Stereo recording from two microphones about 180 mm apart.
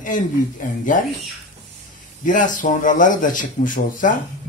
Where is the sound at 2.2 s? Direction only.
45° left (ahead or behind).